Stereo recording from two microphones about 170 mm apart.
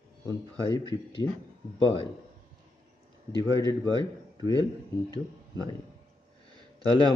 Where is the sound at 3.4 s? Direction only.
25° left (ahead or behind).